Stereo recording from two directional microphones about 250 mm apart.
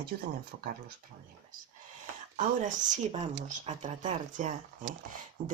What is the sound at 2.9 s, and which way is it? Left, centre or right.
Speech, right.